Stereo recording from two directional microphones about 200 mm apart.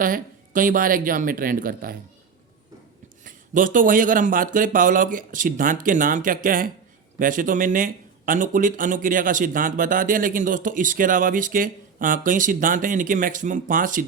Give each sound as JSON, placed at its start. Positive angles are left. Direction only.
{"t": 0.0, "sound": "speech", "side_deg": -45}
{"t": 3.2, "sound": "speech", "side_deg": -40}